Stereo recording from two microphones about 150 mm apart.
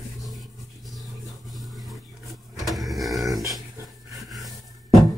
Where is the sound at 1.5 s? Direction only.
Centre (ahead or behind).